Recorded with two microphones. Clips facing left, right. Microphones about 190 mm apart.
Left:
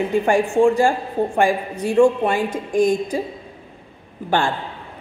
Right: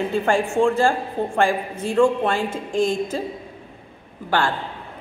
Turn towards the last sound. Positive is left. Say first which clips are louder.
# left 2 dB
turn(degrees=20)  # may be behind; listen again after turning